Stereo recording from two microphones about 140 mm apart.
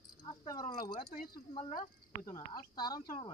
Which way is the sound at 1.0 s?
90° left.